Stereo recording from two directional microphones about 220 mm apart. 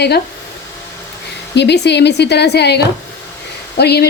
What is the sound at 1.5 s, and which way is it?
Speech, 50° left (ahead or behind).